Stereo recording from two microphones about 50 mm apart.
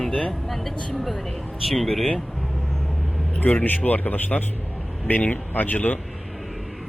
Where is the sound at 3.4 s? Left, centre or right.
Left.